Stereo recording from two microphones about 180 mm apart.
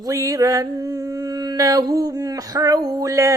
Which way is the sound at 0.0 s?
20° right (ahead or behind).